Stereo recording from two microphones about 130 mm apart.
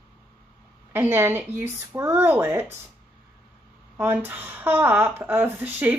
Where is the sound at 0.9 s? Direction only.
15° right (ahead or behind).